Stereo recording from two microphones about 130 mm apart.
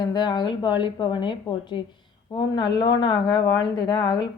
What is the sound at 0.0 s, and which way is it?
A woman's voice, 35° left (ahead or behind).